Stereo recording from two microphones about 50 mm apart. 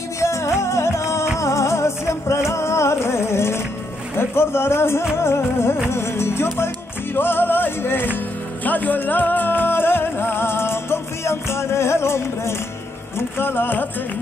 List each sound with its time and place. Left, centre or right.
0.2 s music: left
4.2 s speech: left
5.1 s music: left
7.2 s music: left
13.4 s music: left